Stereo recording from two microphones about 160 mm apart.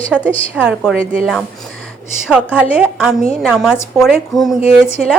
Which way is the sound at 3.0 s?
Centre (ahead or behind).